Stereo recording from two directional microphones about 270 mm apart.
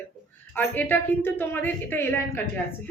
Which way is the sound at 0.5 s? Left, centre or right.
Centre.